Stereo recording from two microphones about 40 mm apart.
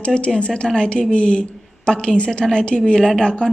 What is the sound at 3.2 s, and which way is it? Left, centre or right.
Speech, left.